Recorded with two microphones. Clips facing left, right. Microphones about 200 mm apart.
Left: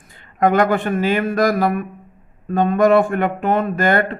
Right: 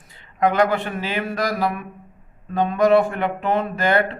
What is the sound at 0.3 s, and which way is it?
Speech, 50° left (ahead or behind).